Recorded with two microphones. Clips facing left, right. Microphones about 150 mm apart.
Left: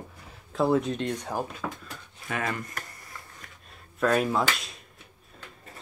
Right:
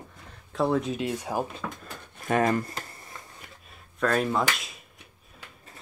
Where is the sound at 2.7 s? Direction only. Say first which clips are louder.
Right 2 dB; 25° right (ahead or behind).